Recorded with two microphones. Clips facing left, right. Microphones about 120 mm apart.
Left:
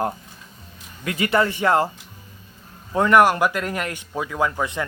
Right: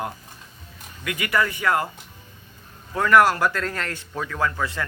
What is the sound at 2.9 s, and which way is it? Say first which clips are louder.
Speech: left 2 dB; 20° left (ahead or behind).